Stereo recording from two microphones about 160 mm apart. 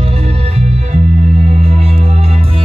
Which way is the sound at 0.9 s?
45° right (ahead or behind).